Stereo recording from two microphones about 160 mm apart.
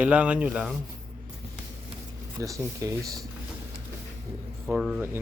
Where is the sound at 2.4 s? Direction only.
20° right (ahead or behind).